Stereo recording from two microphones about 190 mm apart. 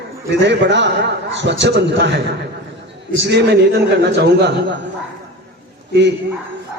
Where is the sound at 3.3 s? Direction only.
60° right (ahead or behind).